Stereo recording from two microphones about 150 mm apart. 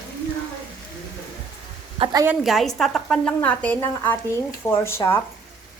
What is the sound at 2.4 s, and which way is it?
A woman's voice, centre (ahead or behind).